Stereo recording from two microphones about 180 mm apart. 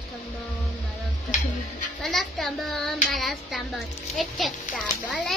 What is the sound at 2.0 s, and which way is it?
Speech, centre (ahead or behind).